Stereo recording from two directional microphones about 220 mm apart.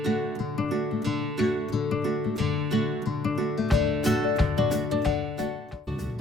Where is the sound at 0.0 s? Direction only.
Centre (ahead or behind).